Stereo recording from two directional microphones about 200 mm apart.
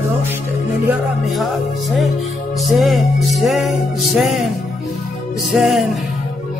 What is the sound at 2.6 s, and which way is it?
Music, centre (ahead or behind).